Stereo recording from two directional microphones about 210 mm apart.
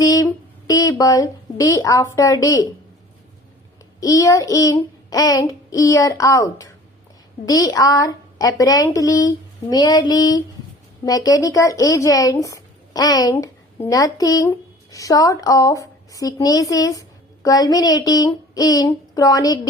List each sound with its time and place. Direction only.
0.0 s a sound: 15° left (ahead or behind)
0.7 s speech: 15° left (ahead or behind)
4.0 s speech: 15° left (ahead or behind)